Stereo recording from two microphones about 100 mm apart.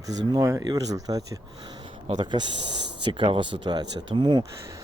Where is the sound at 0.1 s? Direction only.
35° right (ahead or behind).